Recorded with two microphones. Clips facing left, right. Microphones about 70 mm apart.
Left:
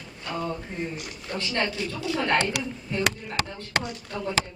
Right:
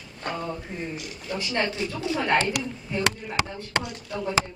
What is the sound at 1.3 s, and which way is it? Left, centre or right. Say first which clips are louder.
Speech: right 1 dB; centre.